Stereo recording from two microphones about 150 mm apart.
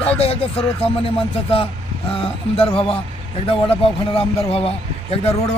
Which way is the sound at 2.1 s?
40° left (ahead or behind).